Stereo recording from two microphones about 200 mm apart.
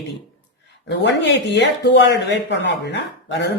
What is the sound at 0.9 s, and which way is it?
Speech, 60° left (ahead or behind).